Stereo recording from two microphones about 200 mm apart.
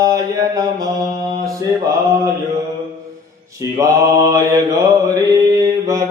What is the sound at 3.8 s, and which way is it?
Mantra, 15° right (ahead or behind).